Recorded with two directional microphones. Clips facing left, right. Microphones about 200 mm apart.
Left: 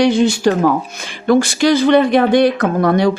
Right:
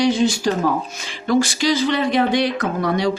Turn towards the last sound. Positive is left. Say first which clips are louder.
# left 6 dB
turn(degrees=55)  # may be behind; listen again after turning